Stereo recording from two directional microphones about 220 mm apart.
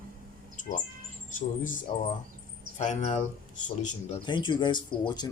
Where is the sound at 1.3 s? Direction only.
35° left (ahead or behind).